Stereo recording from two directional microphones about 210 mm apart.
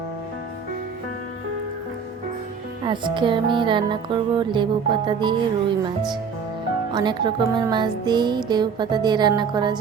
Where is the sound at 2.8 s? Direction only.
20° right (ahead or behind).